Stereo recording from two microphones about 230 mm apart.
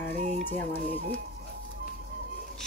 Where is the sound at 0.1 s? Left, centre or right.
Right.